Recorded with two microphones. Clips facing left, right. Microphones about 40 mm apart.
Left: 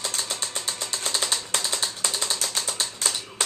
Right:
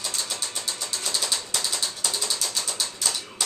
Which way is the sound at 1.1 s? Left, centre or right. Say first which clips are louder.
Left 2 dB; left.